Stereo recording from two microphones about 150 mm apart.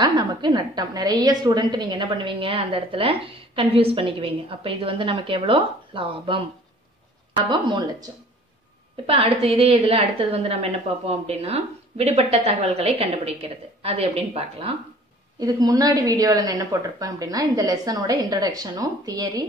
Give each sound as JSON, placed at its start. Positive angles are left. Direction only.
{"t": 0.0, "sound": "a woman's voice", "side_deg": -30}
{"t": 9.0, "sound": "a woman's voice", "side_deg": -40}
{"t": 15.3, "sound": "speech", "side_deg": -25}